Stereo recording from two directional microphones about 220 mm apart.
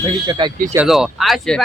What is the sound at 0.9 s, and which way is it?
Speech, centre (ahead or behind).